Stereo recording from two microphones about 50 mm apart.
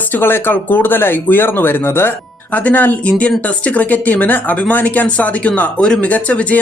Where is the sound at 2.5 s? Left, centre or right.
Left.